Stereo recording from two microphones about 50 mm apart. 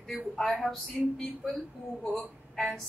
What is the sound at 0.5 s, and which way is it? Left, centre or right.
A woman's voice, centre.